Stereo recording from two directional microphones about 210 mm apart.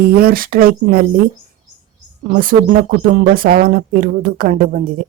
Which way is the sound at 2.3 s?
40° right (ahead or behind).